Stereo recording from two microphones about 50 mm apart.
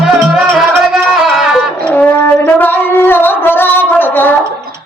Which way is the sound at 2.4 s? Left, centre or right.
Left.